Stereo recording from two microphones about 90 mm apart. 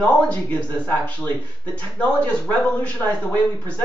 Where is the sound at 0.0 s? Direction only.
15° left (ahead or behind).